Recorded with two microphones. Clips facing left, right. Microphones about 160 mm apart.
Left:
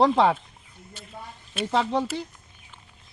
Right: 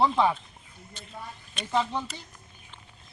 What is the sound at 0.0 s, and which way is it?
Speech, 85° left.